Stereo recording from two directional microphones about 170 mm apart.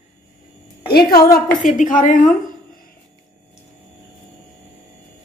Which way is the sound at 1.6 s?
50° left (ahead or behind).